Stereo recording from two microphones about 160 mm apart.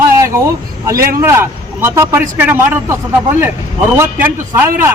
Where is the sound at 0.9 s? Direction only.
65° right (ahead or behind).